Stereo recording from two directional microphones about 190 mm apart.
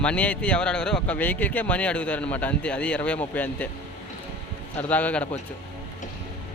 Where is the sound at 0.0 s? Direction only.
5° left (ahead or behind).